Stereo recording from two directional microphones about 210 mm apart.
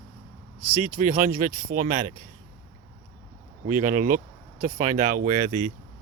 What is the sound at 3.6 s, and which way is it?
Speech, 35° right (ahead or behind).